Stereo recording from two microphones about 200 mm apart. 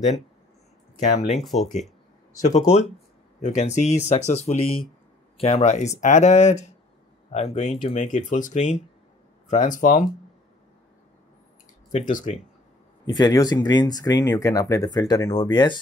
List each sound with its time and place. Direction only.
1.0 s speech: 35° left (ahead or behind)
1.4 s speech: centre (ahead or behind)
2.4 s speech: 35° left (ahead or behind)
12.1 s speech: 40° left (ahead or behind)
13.2 s speech: 20° left (ahead or behind)